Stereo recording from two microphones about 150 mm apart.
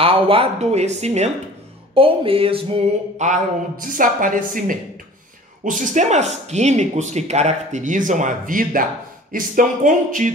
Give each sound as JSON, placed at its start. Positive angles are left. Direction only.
{"t": 0.0, "sound": "speech", "side_deg": -40}
{"t": 2.0, "sound": "a sound", "side_deg": -35}
{"t": 3.2, "sound": "speech", "side_deg": -55}